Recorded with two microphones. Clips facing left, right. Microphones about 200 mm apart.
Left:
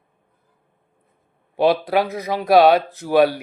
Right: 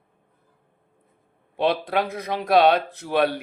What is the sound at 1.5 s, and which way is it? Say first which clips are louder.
Speech: left 5 dB; 5° left (ahead or behind).